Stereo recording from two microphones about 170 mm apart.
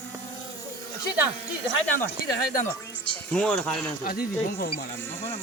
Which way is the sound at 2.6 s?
10° left (ahead or behind).